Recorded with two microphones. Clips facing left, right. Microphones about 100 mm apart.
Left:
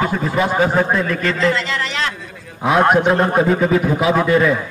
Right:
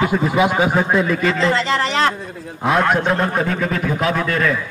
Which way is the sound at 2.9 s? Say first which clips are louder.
Left 3 dB; 10° left (ahead or behind).